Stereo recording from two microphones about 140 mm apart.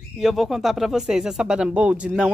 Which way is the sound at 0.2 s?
Centre (ahead or behind).